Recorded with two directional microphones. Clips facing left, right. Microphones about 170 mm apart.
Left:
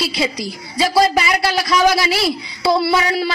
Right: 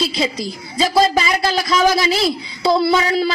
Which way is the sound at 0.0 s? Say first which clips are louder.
Right 1 dB; 20° right (ahead or behind).